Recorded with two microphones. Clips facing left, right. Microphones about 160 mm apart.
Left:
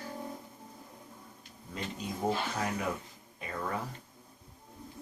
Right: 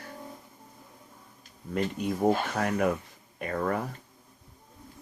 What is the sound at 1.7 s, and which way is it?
Speech, 60° right (ahead or behind).